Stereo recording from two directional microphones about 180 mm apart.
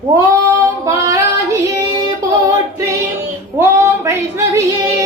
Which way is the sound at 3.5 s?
15° right (ahead or behind).